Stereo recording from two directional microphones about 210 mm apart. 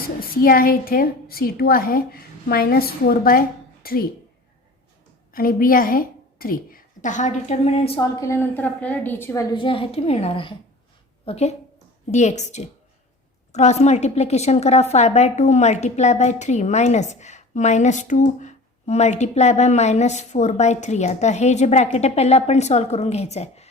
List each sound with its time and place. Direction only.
0.2 s a woman's voice: 45° left (ahead or behind)
5.3 s a woman's voice: 45° left (ahead or behind)
8.1 s a woman's voice: 15° left (ahead or behind); by 23.6 s 30° left (ahead or behind)